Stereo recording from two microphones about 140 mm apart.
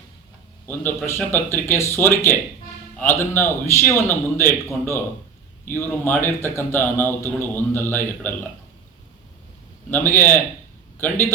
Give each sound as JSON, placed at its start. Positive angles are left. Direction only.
{"t": 0.7, "sound": "a man's voice", "side_deg": 15}
{"t": 5.6, "sound": "a man's voice", "side_deg": 15}
{"t": 9.9, "sound": "a man's voice", "side_deg": 15}